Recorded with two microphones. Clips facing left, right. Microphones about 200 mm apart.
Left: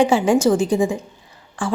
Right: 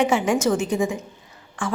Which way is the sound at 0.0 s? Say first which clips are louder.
Left 4 dB; 30° left (ahead or behind).